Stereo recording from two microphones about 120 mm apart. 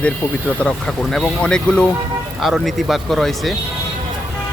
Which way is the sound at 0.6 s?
5° left (ahead or behind).